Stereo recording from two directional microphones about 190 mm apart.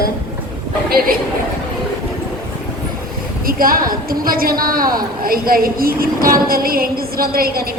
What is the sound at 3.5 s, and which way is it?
A woman's voice, 50° right (ahead or behind).